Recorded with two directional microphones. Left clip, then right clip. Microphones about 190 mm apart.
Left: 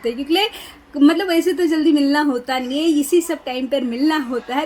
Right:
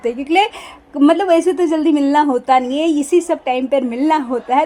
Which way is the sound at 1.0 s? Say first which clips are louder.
Right 4 dB; 15° right (ahead or behind).